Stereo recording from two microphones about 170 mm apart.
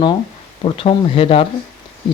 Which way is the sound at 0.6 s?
30° left (ahead or behind).